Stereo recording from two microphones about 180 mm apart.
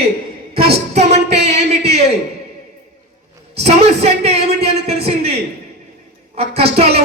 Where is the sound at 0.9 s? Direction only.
40° right (ahead or behind).